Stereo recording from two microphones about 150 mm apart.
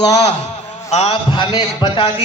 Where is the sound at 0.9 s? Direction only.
45° left (ahead or behind).